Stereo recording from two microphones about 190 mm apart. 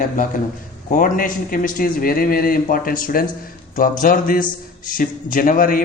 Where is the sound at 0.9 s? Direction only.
45° left (ahead or behind).